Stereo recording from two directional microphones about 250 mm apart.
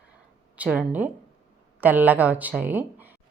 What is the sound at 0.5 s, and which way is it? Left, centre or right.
A woman's voice, centre.